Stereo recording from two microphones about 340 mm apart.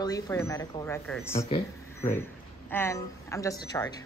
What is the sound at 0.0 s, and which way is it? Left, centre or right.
Speech, centre.